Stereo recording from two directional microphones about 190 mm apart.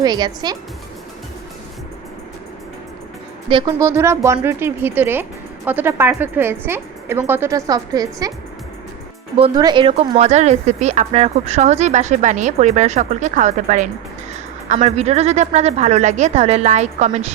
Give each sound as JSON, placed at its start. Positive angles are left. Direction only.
{"t": 0.0, "sound": "speech", "side_deg": -20}
{"t": 3.8, "sound": "speech", "side_deg": -15}
{"t": 9.4, "sound": "speech", "side_deg": -25}